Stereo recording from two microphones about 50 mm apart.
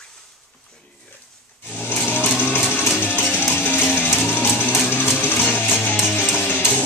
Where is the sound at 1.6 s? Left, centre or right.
Left.